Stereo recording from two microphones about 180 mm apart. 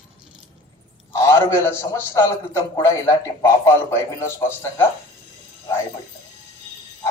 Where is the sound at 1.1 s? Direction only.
15° left (ahead or behind).